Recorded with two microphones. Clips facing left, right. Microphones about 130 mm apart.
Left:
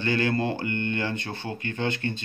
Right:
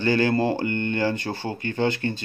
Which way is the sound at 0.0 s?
35° right (ahead or behind).